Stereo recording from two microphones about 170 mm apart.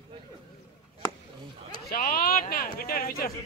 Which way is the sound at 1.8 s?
60° left (ahead or behind).